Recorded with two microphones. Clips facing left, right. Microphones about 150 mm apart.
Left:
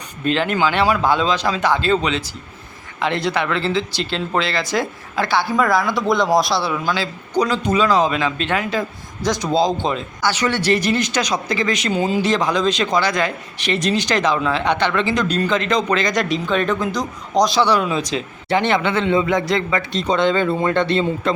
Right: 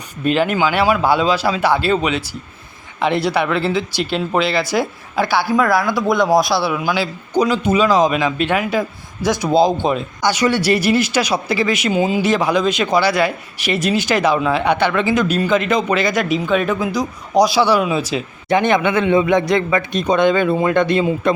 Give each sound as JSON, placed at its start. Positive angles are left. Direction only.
{"t": 0.3, "sound": "speech", "side_deg": -10}